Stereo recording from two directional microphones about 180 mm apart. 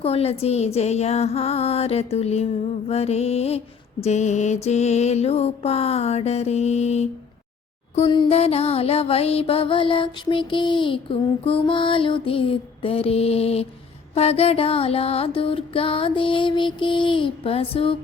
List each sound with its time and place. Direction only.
0.0 s mantra: 35° left (ahead or behind)